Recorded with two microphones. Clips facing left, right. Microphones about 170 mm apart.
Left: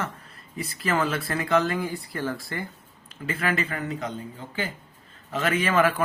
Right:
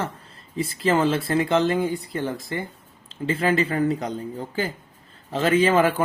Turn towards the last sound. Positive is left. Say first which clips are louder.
# right 4 dB
turn(degrees=-30)  # may be behind; listen again after turning